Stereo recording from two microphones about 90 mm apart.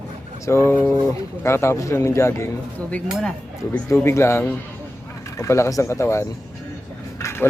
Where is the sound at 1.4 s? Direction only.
30° left (ahead or behind).